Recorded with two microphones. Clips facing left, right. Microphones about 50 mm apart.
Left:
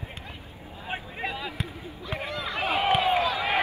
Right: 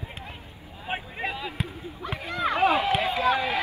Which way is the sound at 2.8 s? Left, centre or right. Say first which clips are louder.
Left 2 dB; left.